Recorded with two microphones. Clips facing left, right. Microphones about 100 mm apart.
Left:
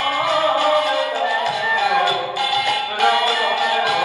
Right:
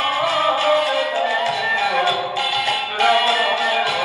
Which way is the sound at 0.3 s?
20° left (ahead or behind).